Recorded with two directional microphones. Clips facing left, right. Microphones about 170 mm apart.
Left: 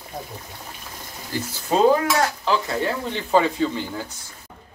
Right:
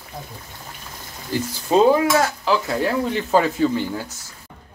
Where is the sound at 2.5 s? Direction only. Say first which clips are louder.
Right 2 dB; centre (ahead or behind).